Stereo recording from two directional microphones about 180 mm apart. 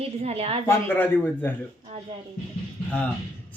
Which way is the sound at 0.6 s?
15° left (ahead or behind).